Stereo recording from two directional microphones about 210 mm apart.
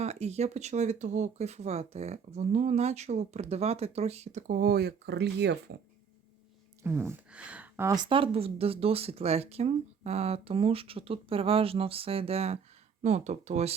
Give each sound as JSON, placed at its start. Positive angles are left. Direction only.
{"t": 0.0, "sound": "speech", "side_deg": -30}
{"t": 6.8, "sound": "speech", "side_deg": -10}